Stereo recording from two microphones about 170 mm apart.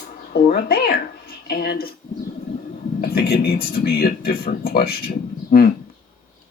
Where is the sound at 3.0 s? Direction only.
65° left (ahead or behind).